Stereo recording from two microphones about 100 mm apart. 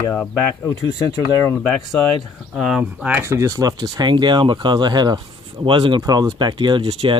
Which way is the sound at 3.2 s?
30° right (ahead or behind).